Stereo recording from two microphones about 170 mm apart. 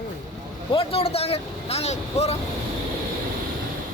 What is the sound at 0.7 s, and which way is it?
Speech, 35° left (ahead or behind).